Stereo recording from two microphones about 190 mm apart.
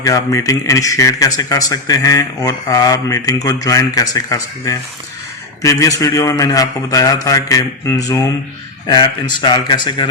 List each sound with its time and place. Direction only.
0.0 s speech: 15° left (ahead or behind)
9.4 s speech: 20° left (ahead or behind)